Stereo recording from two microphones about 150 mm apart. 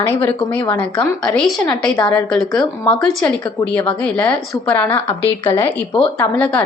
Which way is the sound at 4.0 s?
10° left (ahead or behind).